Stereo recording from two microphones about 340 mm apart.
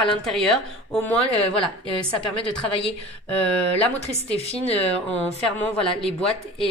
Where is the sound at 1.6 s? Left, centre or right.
Centre.